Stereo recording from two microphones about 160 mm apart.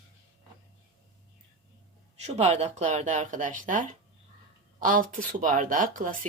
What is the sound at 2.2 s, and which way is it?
Speech, 40° right (ahead or behind).